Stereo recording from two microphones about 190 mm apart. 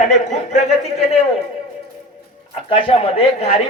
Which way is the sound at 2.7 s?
30° left (ahead or behind).